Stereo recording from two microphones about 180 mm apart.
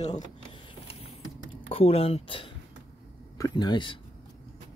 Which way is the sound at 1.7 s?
35° left (ahead or behind).